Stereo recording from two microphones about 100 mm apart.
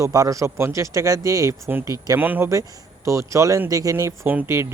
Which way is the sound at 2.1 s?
20° right (ahead or behind).